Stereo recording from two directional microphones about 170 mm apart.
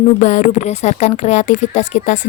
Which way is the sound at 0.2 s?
45° left (ahead or behind).